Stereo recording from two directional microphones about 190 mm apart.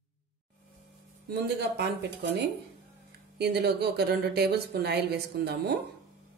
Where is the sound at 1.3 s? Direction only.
60° right (ahead or behind).